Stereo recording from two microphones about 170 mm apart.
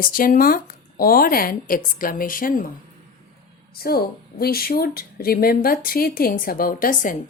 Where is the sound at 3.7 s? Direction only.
65° left (ahead or behind).